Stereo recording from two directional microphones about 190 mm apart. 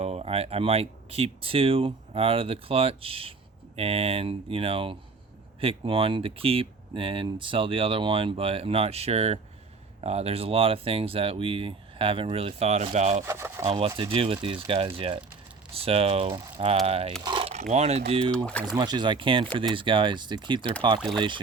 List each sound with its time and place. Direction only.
0.0 s speech: 30° right (ahead or behind)
13.2 s speech: 15° right (ahead or behind)
13.7 s speech: 30° right (ahead or behind)
17.2 s a sound: 30° right (ahead or behind)
17.6 s speech: 35° right (ahead or behind)
18.8 s speech: 25° right (ahead or behind)